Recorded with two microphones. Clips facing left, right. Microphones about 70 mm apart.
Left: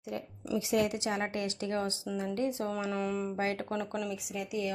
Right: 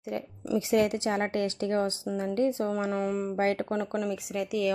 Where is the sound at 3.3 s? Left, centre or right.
Right.